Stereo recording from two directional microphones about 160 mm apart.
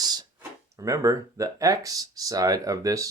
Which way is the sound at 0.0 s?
25° right (ahead or behind).